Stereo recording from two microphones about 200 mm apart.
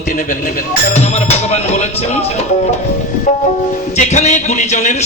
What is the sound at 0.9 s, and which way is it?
A man's voice, 30° left (ahead or behind).